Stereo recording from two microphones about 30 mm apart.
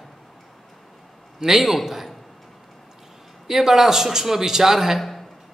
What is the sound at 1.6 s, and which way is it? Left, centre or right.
Speech, centre.